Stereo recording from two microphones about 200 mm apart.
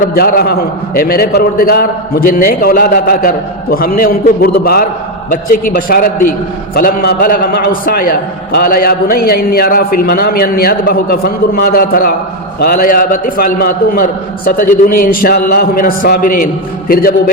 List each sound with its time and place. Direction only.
0.0 s a man's voice: 45° left (ahead or behind)
16.9 s a man's voice: 50° left (ahead or behind)